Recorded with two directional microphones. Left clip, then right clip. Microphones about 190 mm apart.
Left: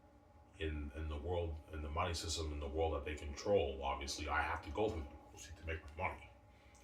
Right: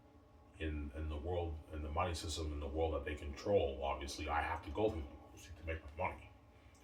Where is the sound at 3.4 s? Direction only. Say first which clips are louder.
Even; 25° right (ahead or behind).